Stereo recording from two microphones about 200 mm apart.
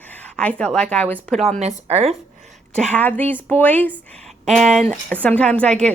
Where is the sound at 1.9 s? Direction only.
30° right (ahead or behind).